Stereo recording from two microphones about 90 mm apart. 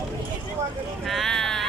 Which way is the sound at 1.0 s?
Centre (ahead or behind).